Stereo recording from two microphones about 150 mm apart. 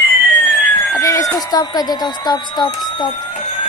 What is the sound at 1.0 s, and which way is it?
Speech, 20° left (ahead or behind).